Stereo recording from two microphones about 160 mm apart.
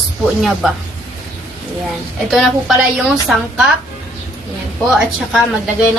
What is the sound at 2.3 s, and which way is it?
A woman's voice, 5° right (ahead or behind).